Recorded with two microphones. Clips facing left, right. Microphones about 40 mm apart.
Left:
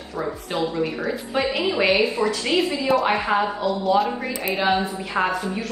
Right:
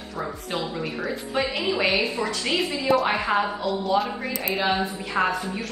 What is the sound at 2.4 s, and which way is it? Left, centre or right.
Speech, left.